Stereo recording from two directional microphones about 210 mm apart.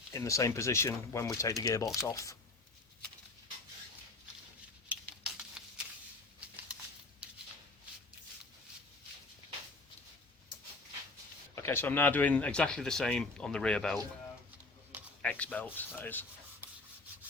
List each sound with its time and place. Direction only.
0.1 s speech: 15° left (ahead or behind)
4.9 s a sound: 5° right (ahead or behind)
11.5 s speech: 10° left (ahead or behind)
15.2 s speech: 5° left (ahead or behind)